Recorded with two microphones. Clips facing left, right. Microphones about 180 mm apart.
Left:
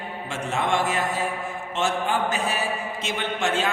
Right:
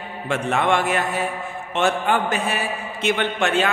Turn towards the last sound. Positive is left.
turn(degrees=-65)  # may be behind; listen again after turning